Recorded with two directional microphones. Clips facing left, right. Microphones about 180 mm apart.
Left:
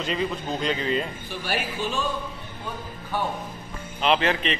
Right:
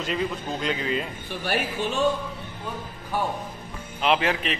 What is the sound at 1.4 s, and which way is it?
Speech, 55° right (ahead or behind).